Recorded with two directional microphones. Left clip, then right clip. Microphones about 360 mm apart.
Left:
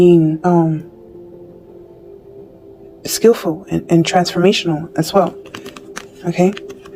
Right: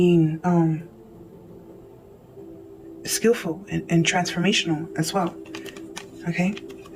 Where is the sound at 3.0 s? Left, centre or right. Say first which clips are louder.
Left 9 dB; centre.